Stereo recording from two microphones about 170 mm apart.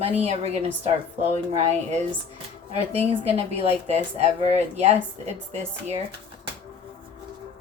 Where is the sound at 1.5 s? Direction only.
40° right (ahead or behind).